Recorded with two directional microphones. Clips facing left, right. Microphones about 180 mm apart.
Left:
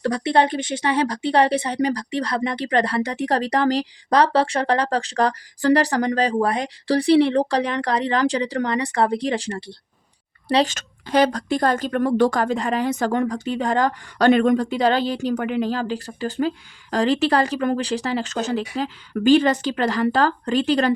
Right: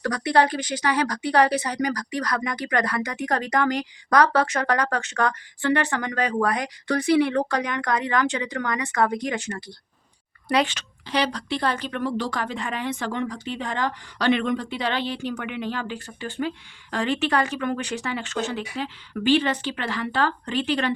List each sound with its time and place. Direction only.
0.0 s speech: 25° left (ahead or behind)
10.8 s speech: 45° left (ahead or behind)